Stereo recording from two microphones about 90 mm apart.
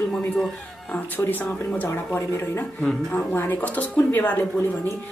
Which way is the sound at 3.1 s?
15° left (ahead or behind).